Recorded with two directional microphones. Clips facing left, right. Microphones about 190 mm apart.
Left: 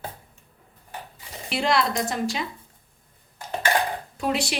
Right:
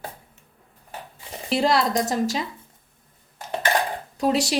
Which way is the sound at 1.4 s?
40° right (ahead or behind).